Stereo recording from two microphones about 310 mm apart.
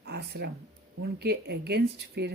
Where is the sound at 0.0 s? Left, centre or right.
Right.